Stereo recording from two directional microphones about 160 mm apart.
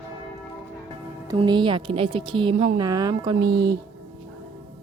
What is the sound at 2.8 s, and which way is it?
A woman's voice, 25° right (ahead or behind).